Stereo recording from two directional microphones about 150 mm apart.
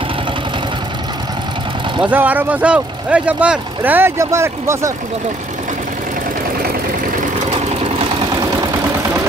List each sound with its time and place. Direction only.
2.0 s speech: 10° right (ahead or behind)
7.2 s vehicle: 55° right (ahead or behind)